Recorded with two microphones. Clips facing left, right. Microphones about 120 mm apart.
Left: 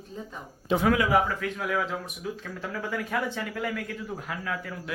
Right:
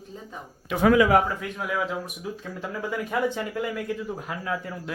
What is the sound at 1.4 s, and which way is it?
A man's voice, 15° right (ahead or behind).